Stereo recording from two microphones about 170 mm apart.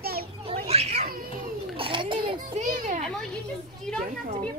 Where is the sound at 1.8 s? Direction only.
30° right (ahead or behind).